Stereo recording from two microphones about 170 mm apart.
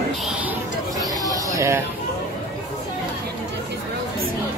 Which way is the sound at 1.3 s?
15° right (ahead or behind).